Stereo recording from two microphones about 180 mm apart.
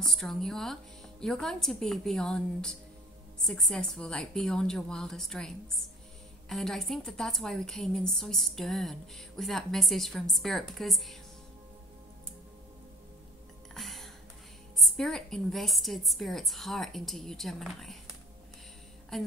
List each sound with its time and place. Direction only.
0.0 s a woman's voice: centre (ahead or behind)
13.7 s music: centre (ahead or behind)
14.8 s a woman's voice: centre (ahead or behind)
19.1 s a sound: centre (ahead or behind)